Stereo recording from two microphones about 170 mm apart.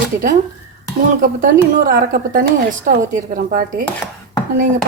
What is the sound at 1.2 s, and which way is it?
A woman's voice, 55° right (ahead or behind).